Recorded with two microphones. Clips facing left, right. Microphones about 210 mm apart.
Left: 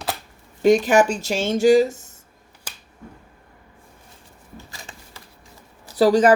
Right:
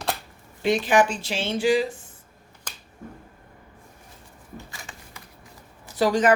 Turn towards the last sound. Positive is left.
turn(degrees=35)  # may be behind; listen again after turning